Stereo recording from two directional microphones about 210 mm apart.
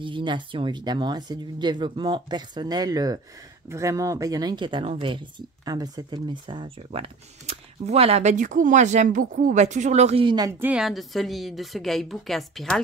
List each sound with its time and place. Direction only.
0.0 s speech: 25° right (ahead or behind)
10.7 s a woman's voice: centre (ahead or behind)